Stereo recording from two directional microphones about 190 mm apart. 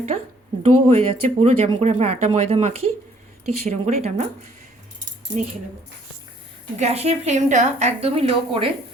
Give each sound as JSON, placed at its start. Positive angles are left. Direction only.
{"t": 0.6, "sound": "speech", "side_deg": -30}
{"t": 5.3, "sound": "speech", "side_deg": -70}
{"t": 6.7, "sound": "speech", "side_deg": -35}